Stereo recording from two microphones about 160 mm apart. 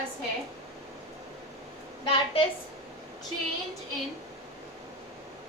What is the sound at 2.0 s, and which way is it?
Speech, 35° left (ahead or behind).